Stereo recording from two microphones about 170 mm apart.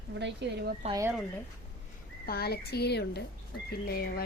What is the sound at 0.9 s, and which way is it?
Speech, 20° right (ahead or behind).